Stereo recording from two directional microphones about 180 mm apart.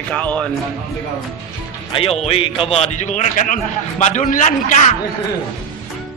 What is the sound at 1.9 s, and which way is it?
A man's voice, 35° left (ahead or behind).